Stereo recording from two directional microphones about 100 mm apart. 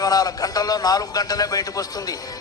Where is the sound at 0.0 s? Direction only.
40° left (ahead or behind).